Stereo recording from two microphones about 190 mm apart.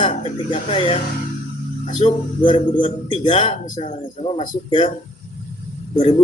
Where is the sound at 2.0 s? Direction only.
35° left (ahead or behind).